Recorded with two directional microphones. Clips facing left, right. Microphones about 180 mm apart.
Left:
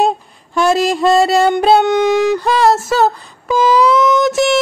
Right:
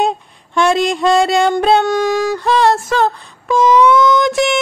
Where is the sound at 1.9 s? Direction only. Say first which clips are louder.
Left 3 dB; 20° left (ahead or behind).